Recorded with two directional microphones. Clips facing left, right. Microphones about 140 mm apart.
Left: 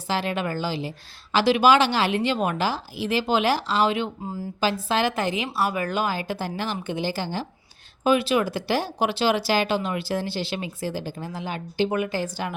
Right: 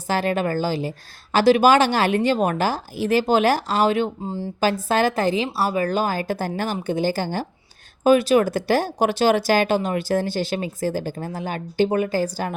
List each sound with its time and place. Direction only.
0.1 s a woman's voice: 45° right (ahead or behind)